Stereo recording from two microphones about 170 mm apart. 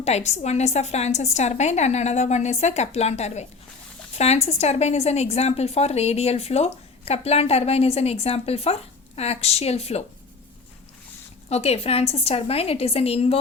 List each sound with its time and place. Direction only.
0.0 s a woman's voice: 40° left (ahead or behind)
11.4 s a woman's voice: 40° left (ahead or behind)